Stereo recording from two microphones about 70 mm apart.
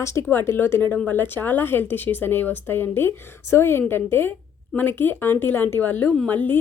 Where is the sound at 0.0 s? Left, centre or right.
Left.